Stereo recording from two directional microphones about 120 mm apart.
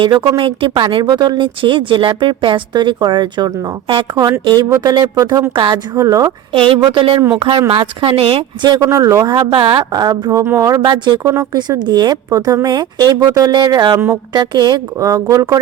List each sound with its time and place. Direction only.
0.0 s speech: 45° right (ahead or behind)
6.5 s a woman's voice: 45° right (ahead or behind)
8.6 s speech: 35° right (ahead or behind)
8.9 s speech: 25° right (ahead or behind)
10.4 s speech: 25° right (ahead or behind)